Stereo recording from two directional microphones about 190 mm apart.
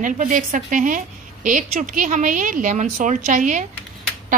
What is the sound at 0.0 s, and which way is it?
A woman's voice, 45° right (ahead or behind).